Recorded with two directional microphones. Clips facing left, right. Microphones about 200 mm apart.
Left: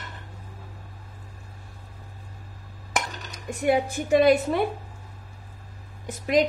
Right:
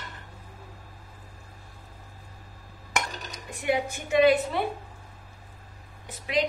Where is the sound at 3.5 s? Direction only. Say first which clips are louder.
Left 5 dB; 40° left (ahead or behind).